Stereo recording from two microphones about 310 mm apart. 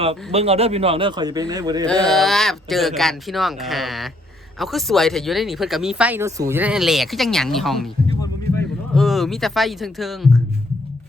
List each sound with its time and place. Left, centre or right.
0.0 s speech: centre
2.0 s speech: centre
8.2 s a sound: centre